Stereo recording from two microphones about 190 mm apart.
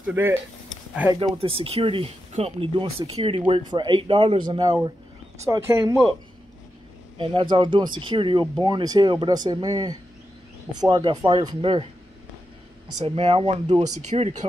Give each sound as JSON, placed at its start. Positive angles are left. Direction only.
{"t": 0.0, "sound": "speech", "side_deg": -10}
{"t": 0.7, "sound": "a sound", "side_deg": -5}
{"t": 1.4, "sound": "speech", "side_deg": -30}
{"t": 7.2, "sound": "speech", "side_deg": -25}
{"t": 13.0, "sound": "speech", "side_deg": -30}